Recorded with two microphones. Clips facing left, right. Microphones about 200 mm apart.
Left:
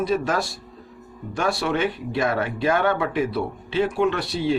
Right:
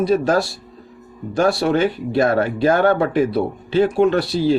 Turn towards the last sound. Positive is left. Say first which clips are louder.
# right 6 dB
turn(degrees=-35)  # may be behind; listen again after turning